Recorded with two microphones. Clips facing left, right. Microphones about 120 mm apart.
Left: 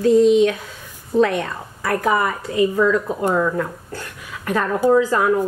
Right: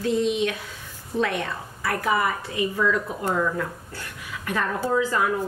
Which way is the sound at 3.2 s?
50° left (ahead or behind).